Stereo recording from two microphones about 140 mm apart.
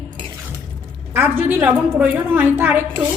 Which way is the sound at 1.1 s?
15° right (ahead or behind).